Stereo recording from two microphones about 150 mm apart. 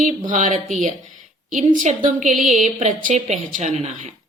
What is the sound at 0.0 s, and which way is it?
A woman's voice, 60° right (ahead or behind).